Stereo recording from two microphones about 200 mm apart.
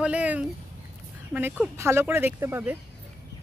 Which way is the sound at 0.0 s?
5° right (ahead or behind).